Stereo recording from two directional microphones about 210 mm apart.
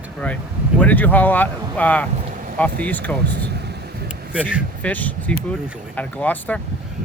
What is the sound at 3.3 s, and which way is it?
Speech, 50° right (ahead or behind).